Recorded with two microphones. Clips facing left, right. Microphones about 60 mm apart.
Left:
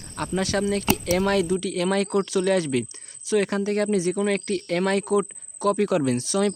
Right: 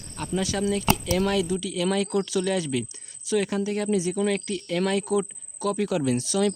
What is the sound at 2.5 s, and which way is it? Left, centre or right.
Speech, left.